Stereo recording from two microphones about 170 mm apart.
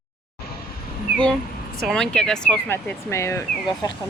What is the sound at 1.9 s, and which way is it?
Speech, 5° left (ahead or behind).